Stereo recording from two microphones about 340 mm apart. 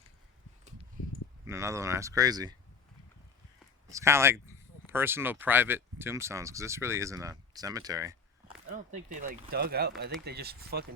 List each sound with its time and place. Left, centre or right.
1.5 s speech: centre
3.8 s speech: centre
8.7 s speech: right